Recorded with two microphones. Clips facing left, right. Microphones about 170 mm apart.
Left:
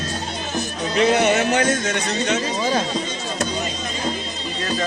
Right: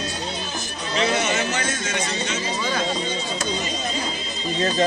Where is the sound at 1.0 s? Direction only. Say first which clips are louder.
Left 6 dB; 55° left (ahead or behind).